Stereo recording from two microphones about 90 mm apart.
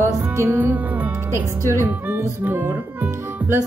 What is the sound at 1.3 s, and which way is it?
Speech, 30° right (ahead or behind).